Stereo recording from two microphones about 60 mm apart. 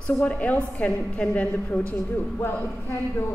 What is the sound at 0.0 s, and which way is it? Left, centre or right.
A woman's voice, centre.